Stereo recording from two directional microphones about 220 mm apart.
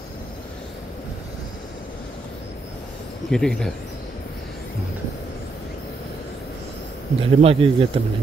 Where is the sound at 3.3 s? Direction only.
5° left (ahead or behind).